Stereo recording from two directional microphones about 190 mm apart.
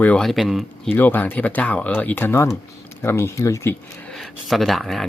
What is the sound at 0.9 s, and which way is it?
Speech, 10° left (ahead or behind).